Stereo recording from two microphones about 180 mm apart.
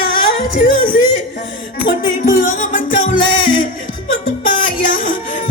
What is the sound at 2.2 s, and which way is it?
Music, 50° left (ahead or behind).